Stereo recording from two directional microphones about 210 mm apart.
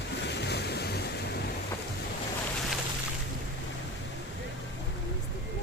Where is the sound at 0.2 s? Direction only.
55° left (ahead or behind).